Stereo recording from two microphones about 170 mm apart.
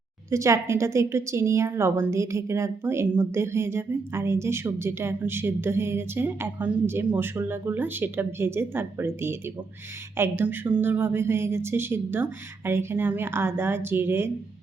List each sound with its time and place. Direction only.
0.3 s a woman's voice: 15° right (ahead or behind)